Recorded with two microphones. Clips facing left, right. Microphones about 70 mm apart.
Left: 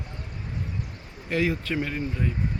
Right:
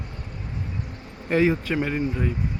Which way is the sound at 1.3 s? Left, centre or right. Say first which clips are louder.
Right 5 dB; right.